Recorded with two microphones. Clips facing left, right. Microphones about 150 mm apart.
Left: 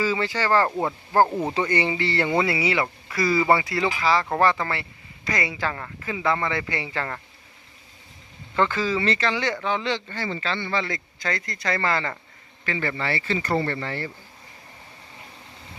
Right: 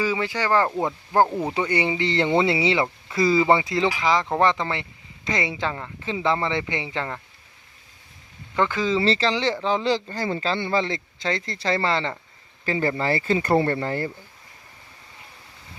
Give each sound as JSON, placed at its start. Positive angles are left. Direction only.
{"t": 0.0, "sound": "speech", "side_deg": -15}
{"t": 8.5, "sound": "speech", "side_deg": -15}
{"t": 9.0, "sound": "speech", "side_deg": -30}
{"t": 10.8, "sound": "speech", "side_deg": -25}
{"t": 12.6, "sound": "speech", "side_deg": -35}